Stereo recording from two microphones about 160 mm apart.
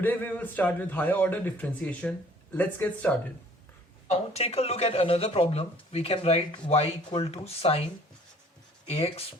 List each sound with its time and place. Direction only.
0.0 s a man's voice: 10° left (ahead or behind)
4.1 s speech: 40° left (ahead or behind)
8.9 s speech: 40° left (ahead or behind)